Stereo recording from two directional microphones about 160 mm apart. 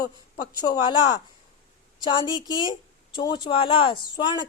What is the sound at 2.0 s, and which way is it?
Speech, 30° left (ahead or behind).